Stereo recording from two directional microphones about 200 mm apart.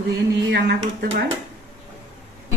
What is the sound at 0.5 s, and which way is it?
Speech, 55° right (ahead or behind).